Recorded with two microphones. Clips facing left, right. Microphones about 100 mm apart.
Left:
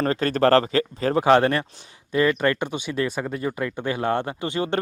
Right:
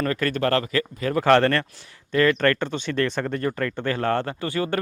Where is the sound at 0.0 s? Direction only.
30° left (ahead or behind).